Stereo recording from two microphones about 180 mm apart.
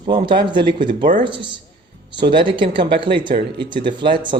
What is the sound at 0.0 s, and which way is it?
Speech, 25° right (ahead or behind).